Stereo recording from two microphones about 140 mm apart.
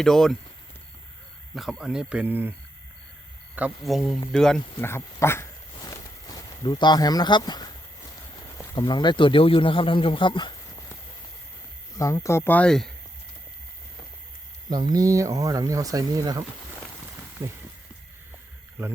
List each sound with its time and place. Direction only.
0.0 s speech: centre (ahead or behind)
1.5 s speech: centre (ahead or behind)
3.8 s speech: centre (ahead or behind)
4.8 s a sound: 20° left (ahead or behind)
8.7 s a man's voice: 35° left (ahead or behind)
11.9 s speech: 20° left (ahead or behind); by 12.9 s 5° left (ahead or behind)
14.7 s speech: 30° right (ahead or behind)
17.4 s speech: 20° right (ahead or behind)